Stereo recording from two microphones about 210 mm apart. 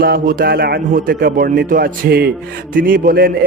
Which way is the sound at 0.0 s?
45° right (ahead or behind).